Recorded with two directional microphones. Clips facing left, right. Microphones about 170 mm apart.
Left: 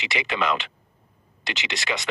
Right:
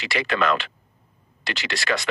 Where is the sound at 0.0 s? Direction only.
20° left (ahead or behind).